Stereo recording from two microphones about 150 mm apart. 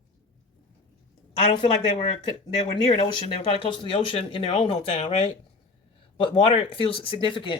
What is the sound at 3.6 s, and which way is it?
Speech, 35° left (ahead or behind).